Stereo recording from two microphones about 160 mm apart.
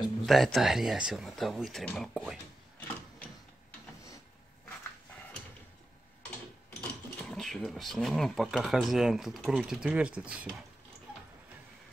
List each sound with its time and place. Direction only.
0.3 s speech: centre (ahead or behind)
6.8 s speech: 5° left (ahead or behind)